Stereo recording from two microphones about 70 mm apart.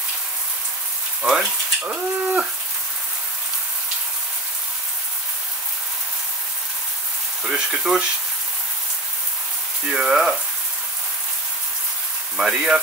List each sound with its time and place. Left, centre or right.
1.2 s speech: centre
1.8 s bird: centre
7.4 s speech: centre
9.8 s speech: centre
12.4 s speech: centre